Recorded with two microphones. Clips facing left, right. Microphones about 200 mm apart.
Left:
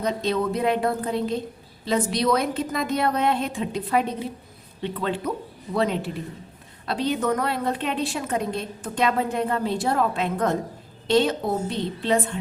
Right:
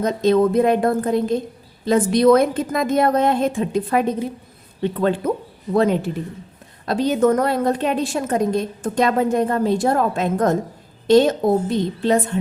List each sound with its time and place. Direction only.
0.0 s a woman's voice: 45° right (ahead or behind)